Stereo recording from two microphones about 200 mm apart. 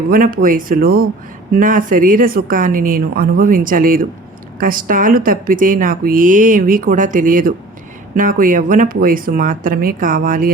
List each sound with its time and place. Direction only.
0.1 s speech: 45° right (ahead or behind)